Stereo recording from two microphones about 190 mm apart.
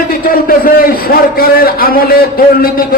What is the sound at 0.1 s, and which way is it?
A man's voice, 50° left (ahead or behind).